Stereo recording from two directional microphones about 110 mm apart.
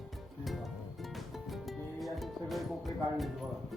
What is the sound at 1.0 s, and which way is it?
Music, centre (ahead or behind).